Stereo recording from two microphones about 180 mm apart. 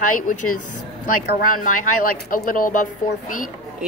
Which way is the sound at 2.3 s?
50° left (ahead or behind).